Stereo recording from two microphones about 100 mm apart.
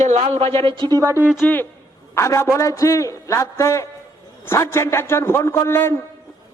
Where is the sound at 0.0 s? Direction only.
80° right.